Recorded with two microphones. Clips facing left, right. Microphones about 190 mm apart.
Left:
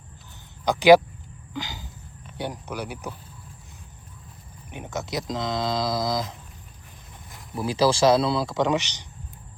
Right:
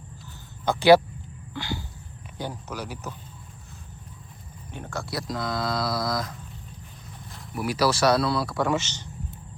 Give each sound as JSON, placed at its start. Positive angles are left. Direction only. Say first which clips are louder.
{"t": 0.6, "sound": "speech", "louder": "left 2 dB", "side_deg": 15}
{"t": 4.7, "sound": "speech", "louder": "left 2 dB", "side_deg": 20}
{"t": 7.5, "sound": "speech", "louder": "left 2 dB", "side_deg": 25}